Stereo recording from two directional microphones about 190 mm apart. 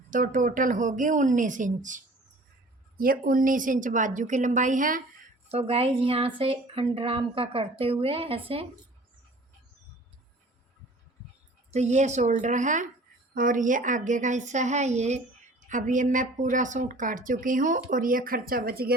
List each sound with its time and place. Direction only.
0.1 s a woman's voice: 40° right (ahead or behind)
3.0 s a woman's voice: 50° right (ahead or behind)
5.5 s speech: 30° right (ahead or behind)
11.7 s a woman's voice: 35° right (ahead or behind); by 18.9 s 55° right (ahead or behind)